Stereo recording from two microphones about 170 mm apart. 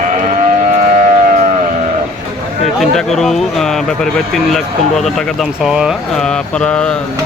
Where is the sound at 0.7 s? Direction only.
55° right (ahead or behind).